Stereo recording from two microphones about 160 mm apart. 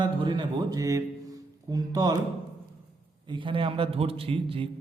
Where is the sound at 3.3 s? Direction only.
30° right (ahead or behind).